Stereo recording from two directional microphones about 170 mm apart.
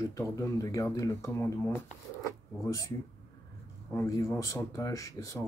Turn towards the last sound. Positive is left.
turn(degrees=20)  # may be behind; listen again after turning